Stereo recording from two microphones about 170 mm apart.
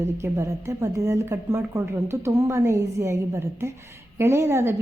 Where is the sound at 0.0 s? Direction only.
15° right (ahead or behind).